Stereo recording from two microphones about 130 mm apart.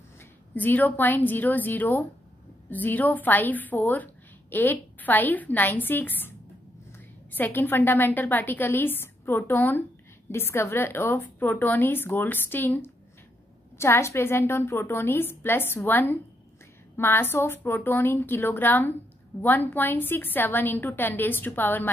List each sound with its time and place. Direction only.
0.6 s a woman's voice: 15° left (ahead or behind)
7.3 s a woman's voice: 15° left (ahead or behind)